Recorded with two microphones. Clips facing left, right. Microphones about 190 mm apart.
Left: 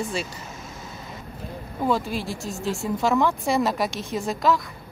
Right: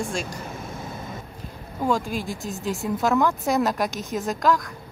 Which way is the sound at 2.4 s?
Centre (ahead or behind).